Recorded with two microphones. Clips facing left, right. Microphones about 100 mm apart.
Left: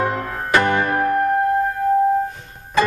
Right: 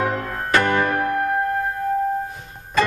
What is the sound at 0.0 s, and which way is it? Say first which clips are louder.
Music: left 1 dB; 15° left (ahead or behind).